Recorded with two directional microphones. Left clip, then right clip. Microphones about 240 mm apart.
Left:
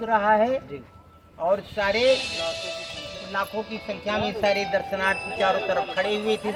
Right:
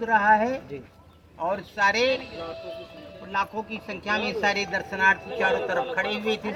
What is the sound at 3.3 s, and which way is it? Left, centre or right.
Speech, centre.